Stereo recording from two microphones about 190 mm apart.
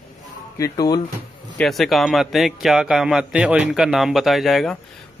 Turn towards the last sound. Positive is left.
turn(degrees=0)  # may be behind; listen again after turning